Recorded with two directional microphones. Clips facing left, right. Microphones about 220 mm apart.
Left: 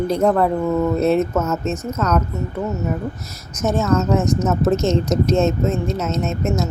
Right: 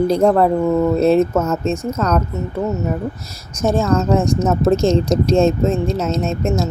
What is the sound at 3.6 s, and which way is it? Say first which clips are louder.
Speech: right 2 dB; 30° right (ahead or behind).